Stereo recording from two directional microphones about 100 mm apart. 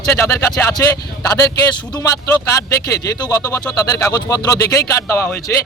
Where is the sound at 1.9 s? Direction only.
35° left (ahead or behind).